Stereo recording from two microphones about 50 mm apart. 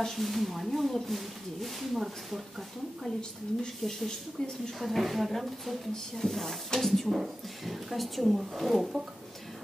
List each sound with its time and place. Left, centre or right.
0.0 s speech: centre
3.2 s a woman's voice: centre
4.7 s speech: centre